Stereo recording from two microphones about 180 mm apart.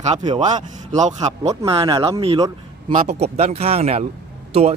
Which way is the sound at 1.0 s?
40° right (ahead or behind).